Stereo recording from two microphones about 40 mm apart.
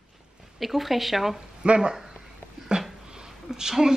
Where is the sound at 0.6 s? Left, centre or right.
Centre.